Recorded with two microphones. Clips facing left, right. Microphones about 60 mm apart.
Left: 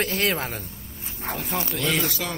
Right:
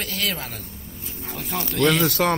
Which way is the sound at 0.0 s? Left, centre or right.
Left.